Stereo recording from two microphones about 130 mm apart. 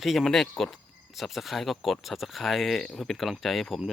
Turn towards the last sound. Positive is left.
turn(degrees=0)  # may be behind; listen again after turning